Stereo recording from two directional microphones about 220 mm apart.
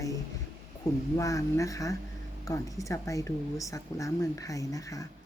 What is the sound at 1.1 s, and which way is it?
Speech, 15° left (ahead or behind).